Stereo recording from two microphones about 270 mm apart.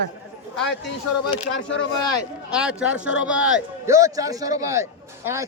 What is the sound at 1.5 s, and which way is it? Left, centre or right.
Speech, left.